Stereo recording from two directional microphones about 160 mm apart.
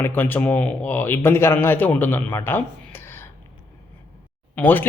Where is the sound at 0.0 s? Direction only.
10° left (ahead or behind).